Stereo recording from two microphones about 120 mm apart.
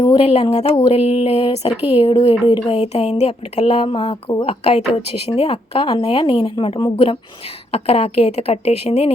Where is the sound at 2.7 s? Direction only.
65° left (ahead or behind).